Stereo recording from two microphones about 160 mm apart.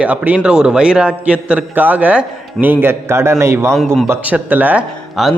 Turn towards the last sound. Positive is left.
turn(degrees=-5)  # may be behind; listen again after turning